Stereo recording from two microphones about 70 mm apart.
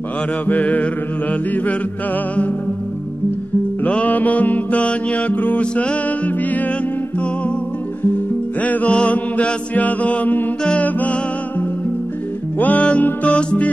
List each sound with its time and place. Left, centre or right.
0.5 s mantra: left
3.8 s mantra: left
8.5 s mantra: left
12.5 s mantra: left